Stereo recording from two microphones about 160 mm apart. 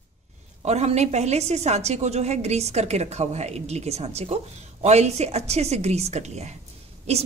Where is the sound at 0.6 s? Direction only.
45° right (ahead or behind).